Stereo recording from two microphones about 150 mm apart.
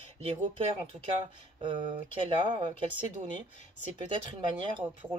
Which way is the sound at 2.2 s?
35° right (ahead or behind).